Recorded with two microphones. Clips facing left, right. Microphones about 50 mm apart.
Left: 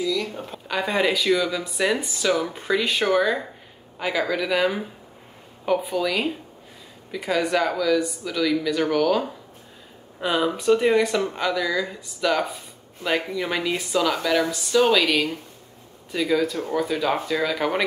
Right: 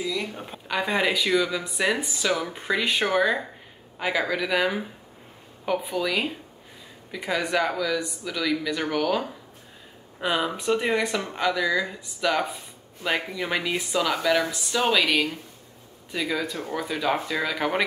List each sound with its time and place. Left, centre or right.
0.0 s a sound: right
0.3 s speech: centre
5.9 s speech: centre
10.2 s speech: centre
13.4 s speech: centre